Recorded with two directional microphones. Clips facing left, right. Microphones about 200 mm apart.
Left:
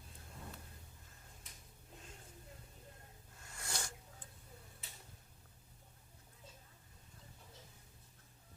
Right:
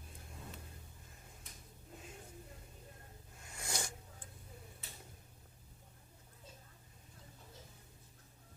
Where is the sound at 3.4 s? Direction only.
15° right (ahead or behind).